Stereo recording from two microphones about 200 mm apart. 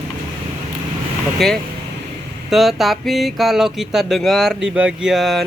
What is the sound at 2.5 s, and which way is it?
Speech, centre (ahead or behind).